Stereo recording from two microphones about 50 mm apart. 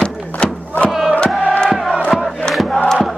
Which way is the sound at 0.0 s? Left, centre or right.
Left.